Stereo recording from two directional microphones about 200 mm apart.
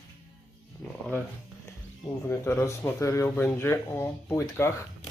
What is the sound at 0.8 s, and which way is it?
Speech, 10° left (ahead or behind).